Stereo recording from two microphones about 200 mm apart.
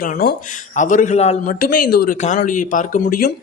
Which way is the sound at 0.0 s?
45° left (ahead or behind).